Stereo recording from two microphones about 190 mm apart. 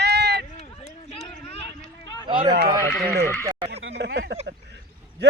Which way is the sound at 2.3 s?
25° right (ahead or behind).